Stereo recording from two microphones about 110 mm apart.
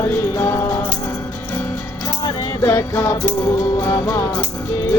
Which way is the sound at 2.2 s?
25° left (ahead or behind).